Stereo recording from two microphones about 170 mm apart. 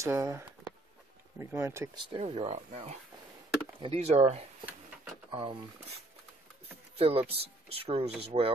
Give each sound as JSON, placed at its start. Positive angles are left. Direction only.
{"t": 0.0, "sound": "speech", "side_deg": -15}
{"t": 2.1, "sound": "speech", "side_deg": -35}
{"t": 7.0, "sound": "speech", "side_deg": -35}